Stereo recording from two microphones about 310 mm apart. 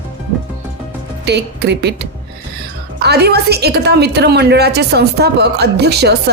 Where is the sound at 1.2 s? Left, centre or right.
Right.